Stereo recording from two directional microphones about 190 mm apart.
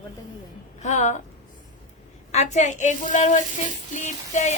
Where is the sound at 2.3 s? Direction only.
35° left (ahead or behind).